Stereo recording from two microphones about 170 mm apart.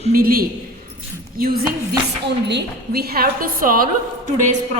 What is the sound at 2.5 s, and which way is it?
A woman's voice, 80° right.